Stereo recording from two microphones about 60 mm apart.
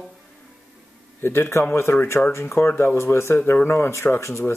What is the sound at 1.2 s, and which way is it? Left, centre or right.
Speech, left.